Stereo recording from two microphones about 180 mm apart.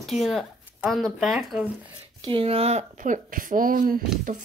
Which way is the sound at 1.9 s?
25° right (ahead or behind).